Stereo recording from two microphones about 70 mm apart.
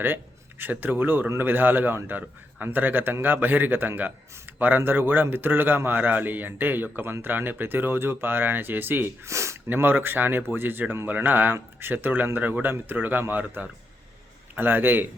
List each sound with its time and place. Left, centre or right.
0.6 s a man's voice: right
9.2 s speech: right
9.6 s a man's voice: right